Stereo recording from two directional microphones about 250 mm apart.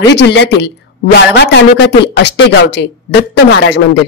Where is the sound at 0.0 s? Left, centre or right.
Left.